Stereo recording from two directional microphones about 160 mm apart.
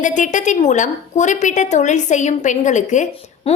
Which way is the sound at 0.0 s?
50° left (ahead or behind).